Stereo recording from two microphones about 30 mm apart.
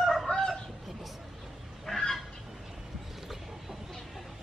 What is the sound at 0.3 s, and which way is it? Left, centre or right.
Fowl, left.